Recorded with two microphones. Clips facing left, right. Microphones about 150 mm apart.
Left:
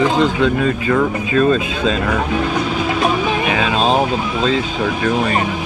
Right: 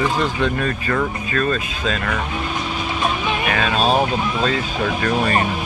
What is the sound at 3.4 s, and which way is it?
Music, 15° left (ahead or behind).